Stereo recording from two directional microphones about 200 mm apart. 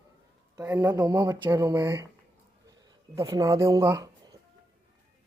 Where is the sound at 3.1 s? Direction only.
15° right (ahead or behind).